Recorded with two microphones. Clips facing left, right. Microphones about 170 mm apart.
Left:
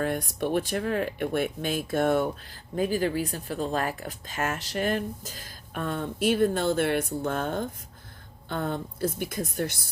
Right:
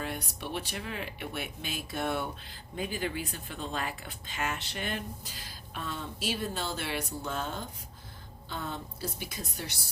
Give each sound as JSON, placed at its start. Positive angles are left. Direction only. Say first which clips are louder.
{"t": 0.0, "sound": "speech", "louder": "left 9 dB", "side_deg": 50}